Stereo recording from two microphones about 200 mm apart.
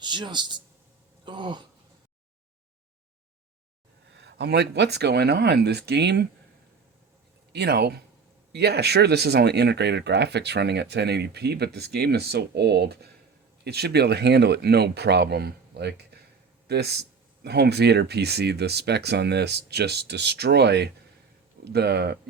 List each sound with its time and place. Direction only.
0.0 s speech: 20° right (ahead or behind)
1.2 s a sound: 25° right (ahead or behind)
4.1 s speech: 60° right (ahead or behind)
7.5 s speech: 55° right (ahead or behind)